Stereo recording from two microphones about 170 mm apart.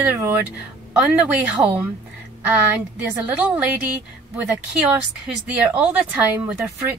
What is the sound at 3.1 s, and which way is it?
Speech, 10° right (ahead or behind).